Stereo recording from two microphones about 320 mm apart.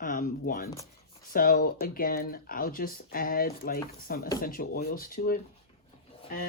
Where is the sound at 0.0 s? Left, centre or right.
Left.